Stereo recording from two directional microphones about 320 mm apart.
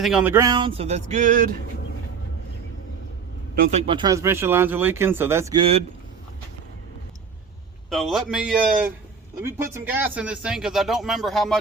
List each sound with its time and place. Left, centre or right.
0.0 s speech: centre; by 1.5 s right
3.5 s speech: right
7.9 s speech: centre